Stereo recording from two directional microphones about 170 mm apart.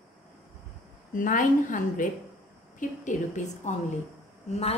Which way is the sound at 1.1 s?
50° left (ahead or behind).